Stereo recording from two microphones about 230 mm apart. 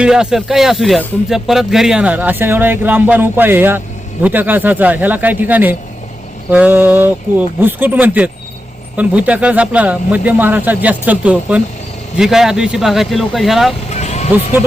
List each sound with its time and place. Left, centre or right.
0.0 s speech: centre
13.9 s vehicle: left